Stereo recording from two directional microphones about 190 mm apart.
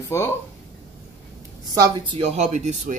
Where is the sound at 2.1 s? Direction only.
30° right (ahead or behind).